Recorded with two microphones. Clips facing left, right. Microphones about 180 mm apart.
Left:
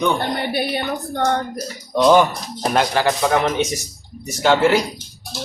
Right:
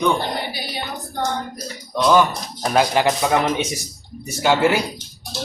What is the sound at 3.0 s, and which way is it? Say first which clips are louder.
Speech: even; 15° right (ahead or behind).